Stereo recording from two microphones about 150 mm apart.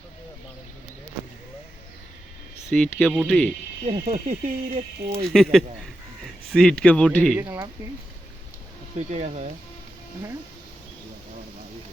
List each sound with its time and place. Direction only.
2.6 s speech: 5° left (ahead or behind)
4.0 s speech: 55° right (ahead or behind)
5.3 s speech: centre (ahead or behind)
7.3 s speech: 20° right (ahead or behind)
9.0 s speech: 50° right (ahead or behind)